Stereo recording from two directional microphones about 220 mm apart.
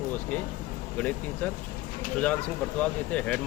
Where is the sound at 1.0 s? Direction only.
5° left (ahead or behind).